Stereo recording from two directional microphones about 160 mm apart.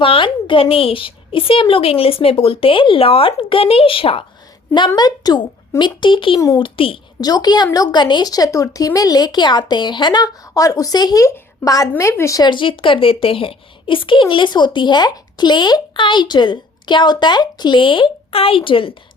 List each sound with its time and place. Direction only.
0.0 s a woman's voice: 35° left (ahead or behind)
6.7 s a woman's voice: 35° left (ahead or behind)